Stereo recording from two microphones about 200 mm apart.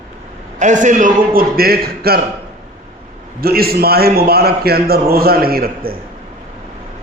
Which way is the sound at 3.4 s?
50° right (ahead or behind).